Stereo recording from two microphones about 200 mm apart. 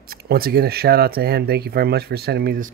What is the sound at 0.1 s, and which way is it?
Speech, 50° right (ahead or behind).